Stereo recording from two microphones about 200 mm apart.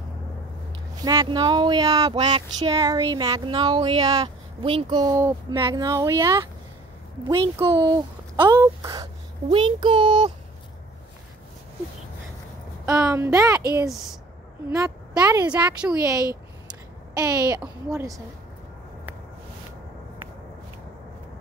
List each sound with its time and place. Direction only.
0.9 s speech: 20° right (ahead or behind)
12.8 s speech: 20° right (ahead or behind)
15.5 s a woman's voice: 5° right (ahead or behind)
16.0 s a child's voice: 15° right (ahead or behind)